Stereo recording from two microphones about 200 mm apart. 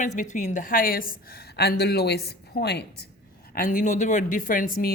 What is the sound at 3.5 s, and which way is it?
Speech, 40° left (ahead or behind).